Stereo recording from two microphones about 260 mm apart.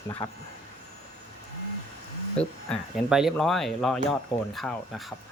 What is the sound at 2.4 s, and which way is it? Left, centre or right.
Speech, centre.